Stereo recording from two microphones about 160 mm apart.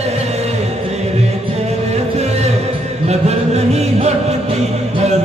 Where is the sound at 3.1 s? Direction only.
40° right (ahead or behind).